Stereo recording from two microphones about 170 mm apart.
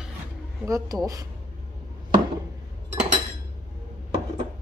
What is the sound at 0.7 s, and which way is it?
Speech, 20° right (ahead or behind).